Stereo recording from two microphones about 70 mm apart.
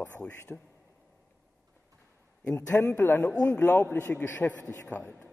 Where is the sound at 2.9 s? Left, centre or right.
Left.